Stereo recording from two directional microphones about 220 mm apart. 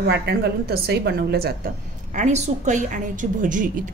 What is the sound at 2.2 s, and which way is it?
Speech, 30° right (ahead or behind).